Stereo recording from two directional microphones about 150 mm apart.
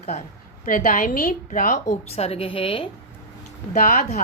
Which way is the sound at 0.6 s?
65° left (ahead or behind).